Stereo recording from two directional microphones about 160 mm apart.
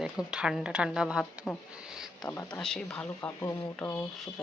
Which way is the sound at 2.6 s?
5° left (ahead or behind).